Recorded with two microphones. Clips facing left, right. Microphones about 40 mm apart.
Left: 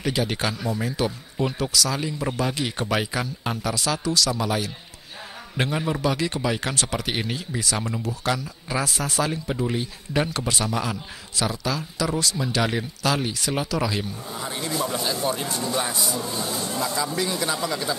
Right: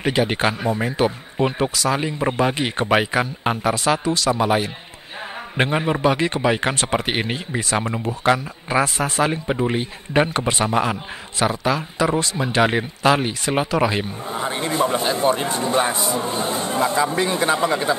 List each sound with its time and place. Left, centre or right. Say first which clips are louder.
0.0 s a man's voice: right 6 dB; right